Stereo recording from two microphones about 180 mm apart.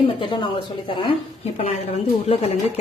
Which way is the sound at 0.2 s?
30° left (ahead or behind).